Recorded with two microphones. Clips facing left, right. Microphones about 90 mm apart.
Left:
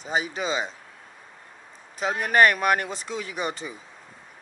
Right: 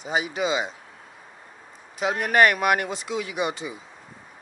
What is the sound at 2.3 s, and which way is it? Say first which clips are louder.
Speech: even; 40° left (ahead or behind).